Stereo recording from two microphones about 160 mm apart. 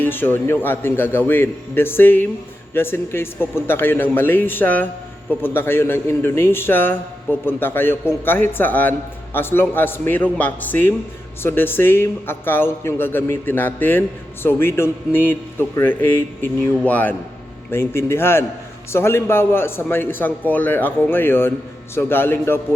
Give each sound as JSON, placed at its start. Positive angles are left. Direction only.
{"t": 0.0, "sound": "a man's voice", "side_deg": 15}